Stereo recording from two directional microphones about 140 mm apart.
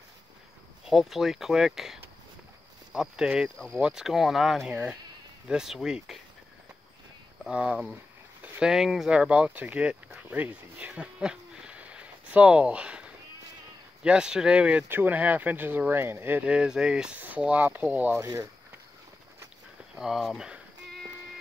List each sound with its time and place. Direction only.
0.8 s speech: centre (ahead or behind)
7.4 s speech: 5° right (ahead or behind)
18.2 s speech: 25° right (ahead or behind)
20.0 s speech: centre (ahead or behind)